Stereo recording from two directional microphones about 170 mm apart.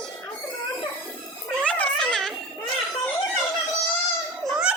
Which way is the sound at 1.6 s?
10° left (ahead or behind).